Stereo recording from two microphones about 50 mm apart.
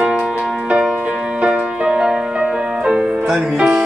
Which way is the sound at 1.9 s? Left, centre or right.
Centre.